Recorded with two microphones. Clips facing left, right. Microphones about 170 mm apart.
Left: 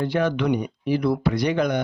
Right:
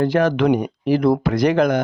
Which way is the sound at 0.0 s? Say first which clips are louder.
Right 6 dB; 90° right.